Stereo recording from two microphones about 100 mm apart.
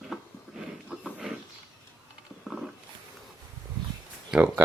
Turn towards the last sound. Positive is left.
turn(degrees=-10)  # may be behind; listen again after turning